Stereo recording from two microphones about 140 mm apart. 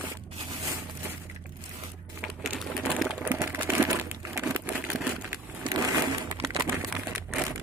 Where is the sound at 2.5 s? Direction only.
Centre (ahead or behind).